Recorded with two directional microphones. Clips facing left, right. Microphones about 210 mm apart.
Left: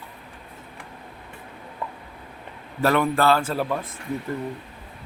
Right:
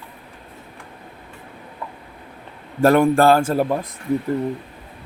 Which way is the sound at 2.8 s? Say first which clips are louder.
Right 6 dB; 45° right (ahead or behind).